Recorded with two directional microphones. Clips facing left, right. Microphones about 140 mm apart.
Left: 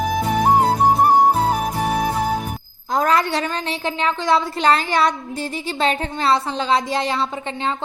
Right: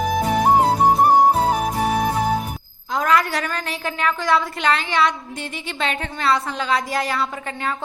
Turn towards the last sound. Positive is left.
turn(degrees=25)  # may be behind; listen again after turning